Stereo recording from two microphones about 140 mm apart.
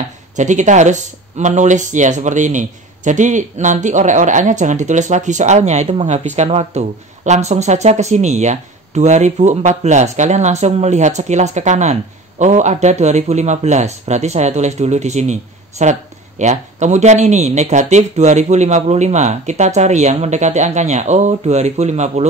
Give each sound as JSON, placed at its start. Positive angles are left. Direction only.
{"t": 0.4, "sound": "a man's voice", "side_deg": -60}